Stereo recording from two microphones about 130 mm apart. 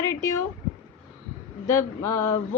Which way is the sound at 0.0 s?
25° left (ahead or behind).